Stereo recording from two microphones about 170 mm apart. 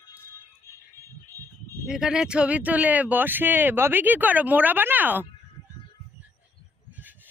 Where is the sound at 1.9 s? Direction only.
5° right (ahead or behind).